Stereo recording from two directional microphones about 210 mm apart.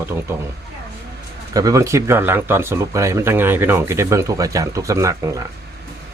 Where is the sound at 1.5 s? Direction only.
15° right (ahead or behind).